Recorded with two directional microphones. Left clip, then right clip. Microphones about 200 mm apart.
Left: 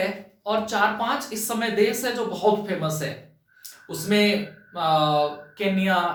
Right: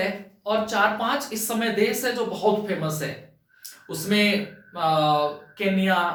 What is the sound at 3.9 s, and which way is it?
Speech, 5° left (ahead or behind).